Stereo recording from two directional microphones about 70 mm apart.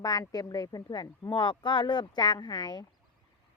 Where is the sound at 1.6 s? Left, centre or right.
Left.